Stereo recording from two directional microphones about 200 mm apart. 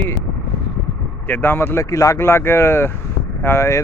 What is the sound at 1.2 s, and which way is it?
Speech, 10° left (ahead or behind).